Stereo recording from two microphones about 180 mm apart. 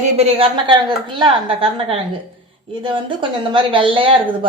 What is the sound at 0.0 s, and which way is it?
A woman's voice, 35° right (ahead or behind).